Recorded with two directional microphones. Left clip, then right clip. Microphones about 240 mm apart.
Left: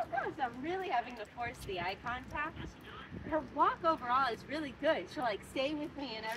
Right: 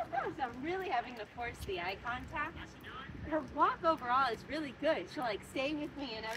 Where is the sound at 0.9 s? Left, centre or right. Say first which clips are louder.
Left 1 dB; centre.